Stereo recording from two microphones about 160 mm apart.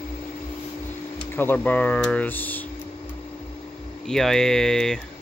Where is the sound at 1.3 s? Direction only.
10° left (ahead or behind).